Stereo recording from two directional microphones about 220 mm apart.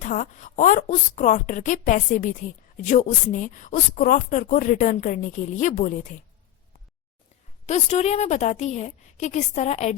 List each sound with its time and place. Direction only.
0.0 s speech: 35° left (ahead or behind)
7.7 s speech: 30° left (ahead or behind)